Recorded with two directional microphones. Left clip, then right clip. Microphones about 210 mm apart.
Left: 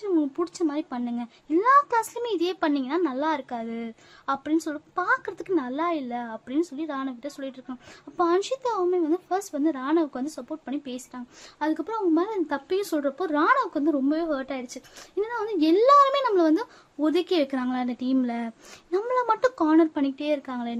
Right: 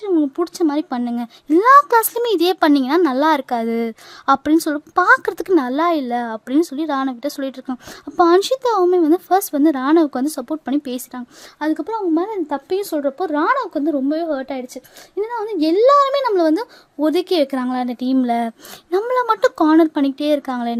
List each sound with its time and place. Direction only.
0.0 s a child's voice: 40° right (ahead or behind)
11.6 s speech: 35° right (ahead or behind)